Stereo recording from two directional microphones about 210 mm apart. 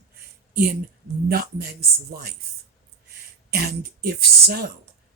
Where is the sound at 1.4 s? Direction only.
50° right (ahead or behind).